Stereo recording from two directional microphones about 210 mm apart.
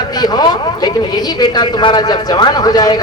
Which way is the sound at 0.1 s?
20° left (ahead or behind).